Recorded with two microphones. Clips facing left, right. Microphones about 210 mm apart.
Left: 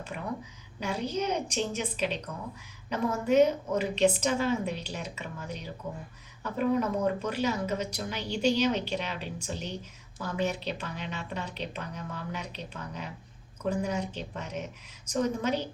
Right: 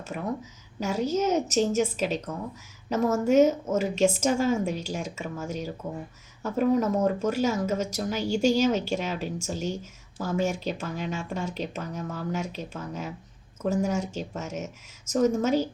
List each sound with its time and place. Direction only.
0.8 s speech: 45° right (ahead or behind)